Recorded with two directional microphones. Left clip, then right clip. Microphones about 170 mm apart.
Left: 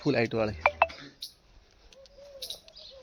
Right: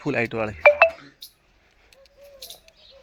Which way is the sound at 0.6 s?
65° right (ahead or behind).